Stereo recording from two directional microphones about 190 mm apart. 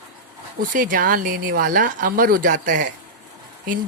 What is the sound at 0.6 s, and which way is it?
A woman's voice, 45° right (ahead or behind).